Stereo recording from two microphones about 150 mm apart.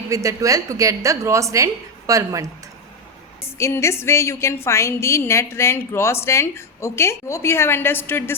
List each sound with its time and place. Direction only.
0.1 s a woman's voice: 20° right (ahead or behind)
3.4 s a woman's voice: 20° left (ahead or behind)